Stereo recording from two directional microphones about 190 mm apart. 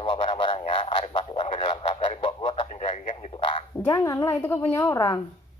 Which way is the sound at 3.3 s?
25° left (ahead or behind).